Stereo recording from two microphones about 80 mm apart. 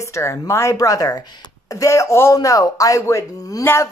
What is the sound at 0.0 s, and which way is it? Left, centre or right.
Speech, left.